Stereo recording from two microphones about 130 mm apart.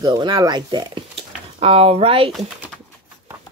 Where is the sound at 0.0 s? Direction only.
35° right (ahead or behind).